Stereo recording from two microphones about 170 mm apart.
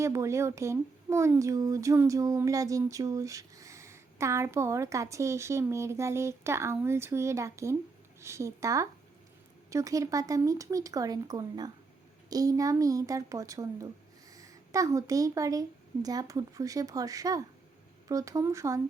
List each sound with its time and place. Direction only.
0.0 s speech: 15° right (ahead or behind)